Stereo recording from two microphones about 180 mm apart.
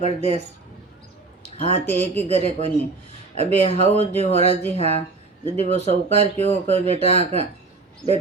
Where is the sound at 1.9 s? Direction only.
35° right (ahead or behind).